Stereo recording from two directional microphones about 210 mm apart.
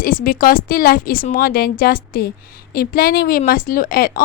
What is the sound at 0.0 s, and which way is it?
Speech, 40° left (ahead or behind).